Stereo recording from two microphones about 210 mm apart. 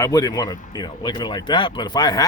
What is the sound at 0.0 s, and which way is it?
Speech, 15° left (ahead or behind).